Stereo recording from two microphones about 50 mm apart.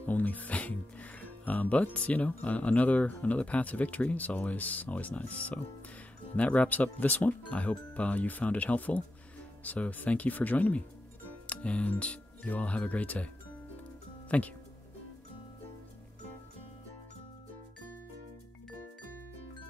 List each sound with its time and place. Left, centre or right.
0.0 s speech: left
11.2 s music: left
12.0 s speech: left
14.3 s speech: left